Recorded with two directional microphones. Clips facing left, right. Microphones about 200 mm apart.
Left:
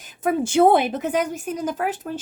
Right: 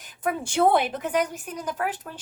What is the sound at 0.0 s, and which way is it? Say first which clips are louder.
A woman's voice: left 6 dB; 25° left (ahead or behind).